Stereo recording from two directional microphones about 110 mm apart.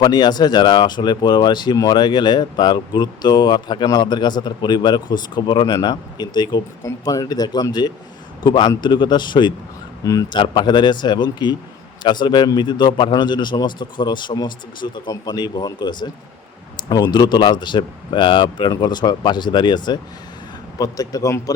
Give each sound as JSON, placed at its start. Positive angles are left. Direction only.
{"t": 0.0, "sound": "speech", "side_deg": 40}
{"t": 10.0, "sound": "speech", "side_deg": 30}
{"t": 10.3, "sound": "speech", "side_deg": 45}